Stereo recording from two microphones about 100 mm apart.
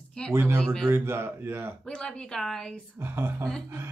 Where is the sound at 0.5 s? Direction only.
5° left (ahead or behind).